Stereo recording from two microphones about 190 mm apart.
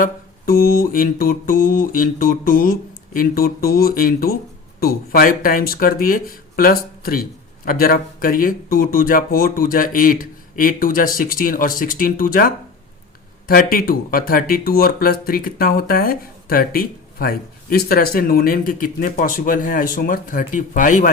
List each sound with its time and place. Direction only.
0.0 s speech: 50° left (ahead or behind)